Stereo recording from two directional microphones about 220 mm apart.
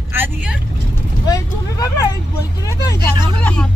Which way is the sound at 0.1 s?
10° right (ahead or behind).